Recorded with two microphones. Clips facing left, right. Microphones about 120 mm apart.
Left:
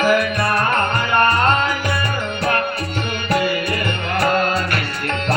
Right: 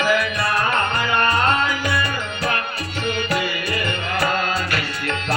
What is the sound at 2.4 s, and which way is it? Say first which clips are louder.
Music: left 5 dB; 50° left (ahead or behind).